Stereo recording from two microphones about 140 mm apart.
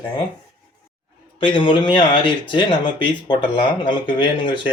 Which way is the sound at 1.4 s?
35° left (ahead or behind).